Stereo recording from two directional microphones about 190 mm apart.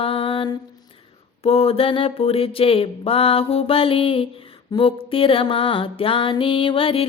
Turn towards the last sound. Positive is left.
turn(degrees=30)  # may be behind; listen again after turning